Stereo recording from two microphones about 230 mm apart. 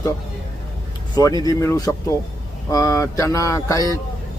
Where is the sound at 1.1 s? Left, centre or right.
Centre.